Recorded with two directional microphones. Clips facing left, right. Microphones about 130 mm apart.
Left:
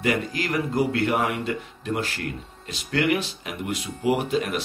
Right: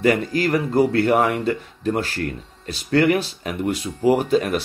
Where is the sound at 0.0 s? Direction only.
40° right (ahead or behind).